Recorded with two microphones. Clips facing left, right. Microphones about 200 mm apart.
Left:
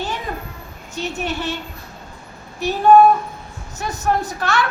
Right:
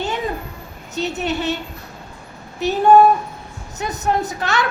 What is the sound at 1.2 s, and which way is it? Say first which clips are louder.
Speech: right 3 dB; 20° right (ahead or behind).